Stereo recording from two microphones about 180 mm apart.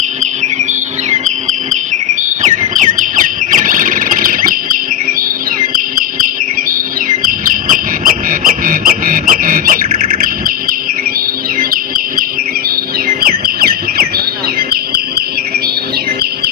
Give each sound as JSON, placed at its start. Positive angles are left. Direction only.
{"t": 0.2, "sound": "bird", "side_deg": -40}
{"t": 7.3, "sound": "cricket", "side_deg": -50}
{"t": 11.7, "sound": "chirp", "side_deg": -55}